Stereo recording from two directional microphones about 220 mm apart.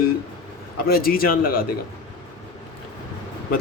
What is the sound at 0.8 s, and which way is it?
Speech, 45° left (ahead or behind).